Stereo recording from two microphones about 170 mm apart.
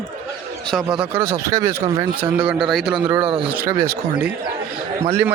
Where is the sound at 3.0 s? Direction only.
25° right (ahead or behind).